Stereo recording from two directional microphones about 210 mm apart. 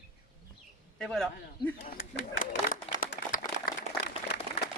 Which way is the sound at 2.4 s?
40° left (ahead or behind).